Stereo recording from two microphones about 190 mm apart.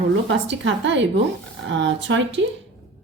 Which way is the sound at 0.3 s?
70° right (ahead or behind).